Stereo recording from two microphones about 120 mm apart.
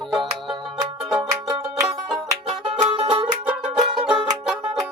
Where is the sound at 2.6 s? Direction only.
50° right (ahead or behind).